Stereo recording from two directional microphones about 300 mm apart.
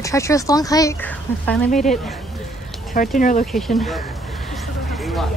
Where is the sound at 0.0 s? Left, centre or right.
Centre.